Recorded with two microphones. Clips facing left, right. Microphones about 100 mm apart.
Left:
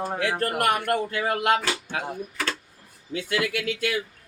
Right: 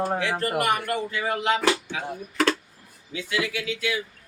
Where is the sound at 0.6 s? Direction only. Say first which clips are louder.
Left 4 dB; 55° left (ahead or behind).